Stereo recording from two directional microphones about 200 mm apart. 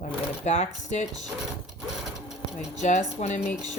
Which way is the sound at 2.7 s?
35° left (ahead or behind).